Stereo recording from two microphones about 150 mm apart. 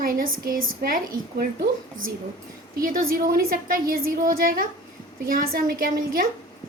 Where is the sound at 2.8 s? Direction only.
80° right.